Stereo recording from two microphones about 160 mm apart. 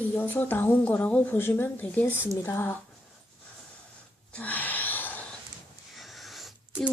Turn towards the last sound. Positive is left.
turn(degrees=0)  # may be behind; listen again after turning